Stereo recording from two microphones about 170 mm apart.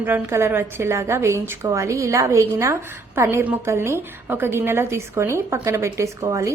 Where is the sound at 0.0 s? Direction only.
15° right (ahead or behind).